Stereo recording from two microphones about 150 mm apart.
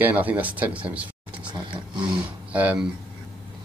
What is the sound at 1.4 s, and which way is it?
Speech, 30° right (ahead or behind).